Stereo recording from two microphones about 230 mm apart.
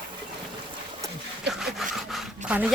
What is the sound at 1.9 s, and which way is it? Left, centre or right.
Dog, centre.